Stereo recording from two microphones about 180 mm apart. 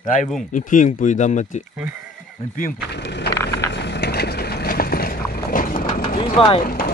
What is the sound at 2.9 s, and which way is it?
Speech, 70° left (ahead or behind).